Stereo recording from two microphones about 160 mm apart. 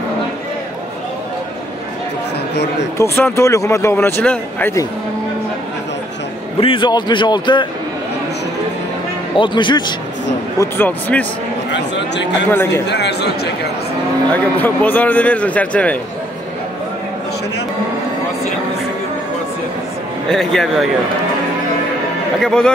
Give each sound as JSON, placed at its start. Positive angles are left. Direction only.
{"t": 3.0, "sound": "speech", "side_deg": 15}
{"t": 6.6, "sound": "speech", "side_deg": 30}
{"t": 9.4, "sound": "speech", "side_deg": 30}
{"t": 10.6, "sound": "speech", "side_deg": 10}
{"t": 11.7, "sound": "a man's voice", "side_deg": 90}
{"t": 12.4, "sound": "speech", "side_deg": 10}
{"t": 12.8, "sound": "a man's voice", "side_deg": 90}
{"t": 14.3, "sound": "speech", "side_deg": 10}
{"t": 20.2, "sound": "speech", "side_deg": 5}
{"t": 22.4, "sound": "speech", "side_deg": 5}